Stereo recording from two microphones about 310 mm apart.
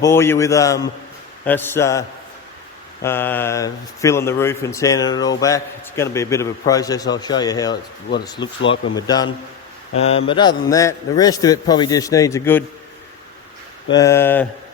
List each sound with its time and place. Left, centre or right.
0.0 s speech: centre
13.9 s speech: centre